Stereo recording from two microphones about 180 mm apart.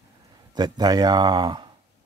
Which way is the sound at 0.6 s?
25° right (ahead or behind).